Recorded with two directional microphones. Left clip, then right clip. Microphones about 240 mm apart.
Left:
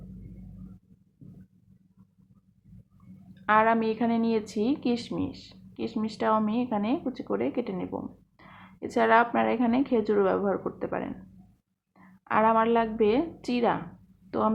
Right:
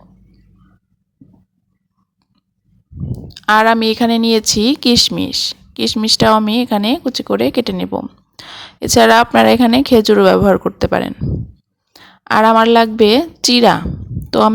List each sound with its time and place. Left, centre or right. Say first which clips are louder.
3.4 s speech: right 12 dB; right
12.2 s speech: right 13 dB; right